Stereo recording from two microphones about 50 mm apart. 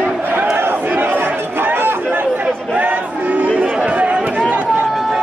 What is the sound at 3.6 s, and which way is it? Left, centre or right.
Chatter, right.